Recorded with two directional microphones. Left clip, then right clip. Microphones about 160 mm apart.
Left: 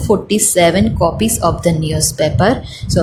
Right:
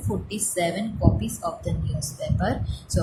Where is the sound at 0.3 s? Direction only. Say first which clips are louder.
Left 12 dB; 55° left (ahead or behind).